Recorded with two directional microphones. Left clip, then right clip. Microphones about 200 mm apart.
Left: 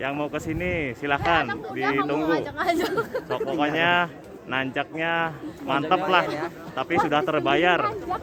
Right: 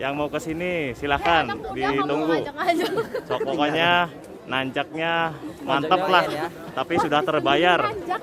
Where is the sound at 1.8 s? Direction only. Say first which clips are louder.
Right 1 dB; 45° left (ahead or behind).